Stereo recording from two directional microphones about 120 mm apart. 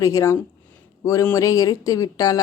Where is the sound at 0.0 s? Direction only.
25° left (ahead or behind).